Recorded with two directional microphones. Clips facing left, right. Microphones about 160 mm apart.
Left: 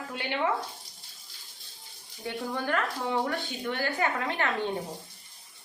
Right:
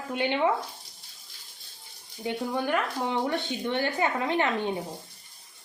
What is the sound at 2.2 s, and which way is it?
Speech, 15° right (ahead or behind).